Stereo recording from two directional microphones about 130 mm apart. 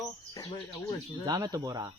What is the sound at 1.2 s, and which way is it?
Speech, 30° right (ahead or behind).